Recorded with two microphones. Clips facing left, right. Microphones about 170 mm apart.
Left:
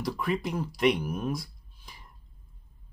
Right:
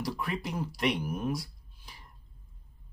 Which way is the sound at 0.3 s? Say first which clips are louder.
Left 4 dB; centre (ahead or behind).